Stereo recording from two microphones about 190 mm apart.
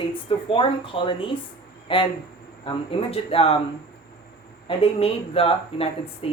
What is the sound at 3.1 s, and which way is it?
Speech, 30° left (ahead or behind).